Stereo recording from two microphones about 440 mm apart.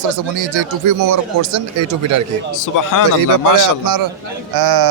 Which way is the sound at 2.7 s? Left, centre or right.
Left.